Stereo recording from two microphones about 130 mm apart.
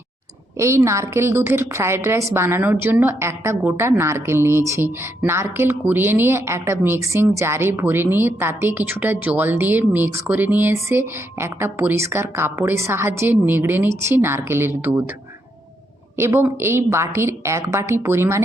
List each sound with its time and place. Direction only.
0.5 s a woman's voice: 20° right (ahead or behind)
16.1 s a woman's voice: 20° right (ahead or behind)